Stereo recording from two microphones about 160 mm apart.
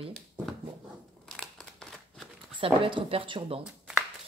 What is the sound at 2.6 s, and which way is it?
Speech, 35° right (ahead or behind).